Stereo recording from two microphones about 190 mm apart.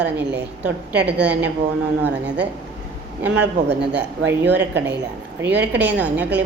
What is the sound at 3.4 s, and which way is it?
Speech, 60° right (ahead or behind).